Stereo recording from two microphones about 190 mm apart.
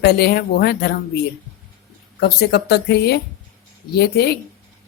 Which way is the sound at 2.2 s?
60° left (ahead or behind).